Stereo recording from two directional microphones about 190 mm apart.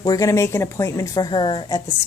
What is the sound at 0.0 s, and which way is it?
A woman's voice, 20° left (ahead or behind).